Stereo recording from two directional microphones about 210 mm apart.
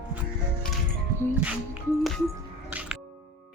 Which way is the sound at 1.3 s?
5° right (ahead or behind).